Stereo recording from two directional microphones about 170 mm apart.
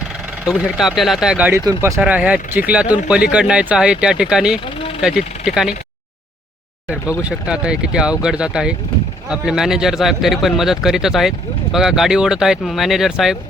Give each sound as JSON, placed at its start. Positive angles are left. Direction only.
{"t": 0.4, "sound": "speech", "side_deg": 0}
{"t": 1.6, "sound": "speech", "side_deg": -20}
{"t": 2.0, "sound": "speech", "side_deg": -10}
{"t": 7.2, "sound": "speech", "side_deg": -5}